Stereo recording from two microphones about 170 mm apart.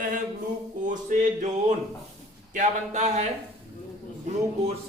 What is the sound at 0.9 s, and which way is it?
Music, 45° right (ahead or behind).